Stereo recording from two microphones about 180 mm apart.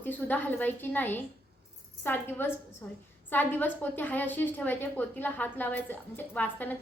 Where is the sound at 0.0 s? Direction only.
10° left (ahead or behind).